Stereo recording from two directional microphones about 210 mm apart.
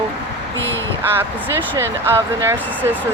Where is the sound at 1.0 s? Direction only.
10° right (ahead or behind).